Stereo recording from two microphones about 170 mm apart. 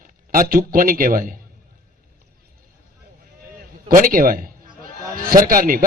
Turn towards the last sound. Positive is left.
turn(degrees=-55)  # may be behind; listen again after turning